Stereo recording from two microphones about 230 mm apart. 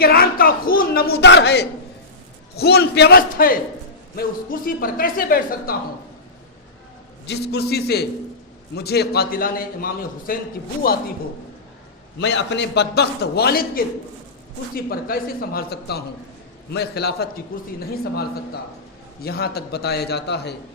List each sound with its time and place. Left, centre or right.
0.0 s a man's voice: left
7.3 s a man's voice: left
12.2 s a man's voice: left